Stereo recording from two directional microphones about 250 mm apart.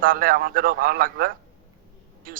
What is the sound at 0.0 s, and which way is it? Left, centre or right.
Speech, right.